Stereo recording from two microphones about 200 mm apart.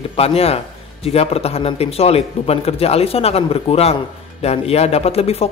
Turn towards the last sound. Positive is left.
turn(degrees=30)  # may be behind; listen again after turning